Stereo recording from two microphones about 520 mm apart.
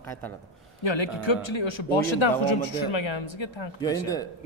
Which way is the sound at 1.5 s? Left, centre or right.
Left.